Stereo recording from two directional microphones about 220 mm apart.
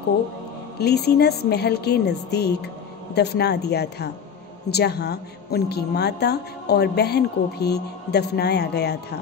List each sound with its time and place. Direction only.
0.7 s a woman's voice: 45° left (ahead or behind)